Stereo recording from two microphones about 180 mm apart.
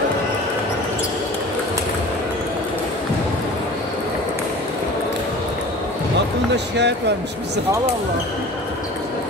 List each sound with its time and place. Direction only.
6.5 s speech: 70° right (ahead or behind)